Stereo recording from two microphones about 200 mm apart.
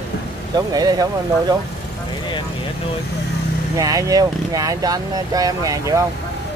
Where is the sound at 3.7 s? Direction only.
15° right (ahead or behind).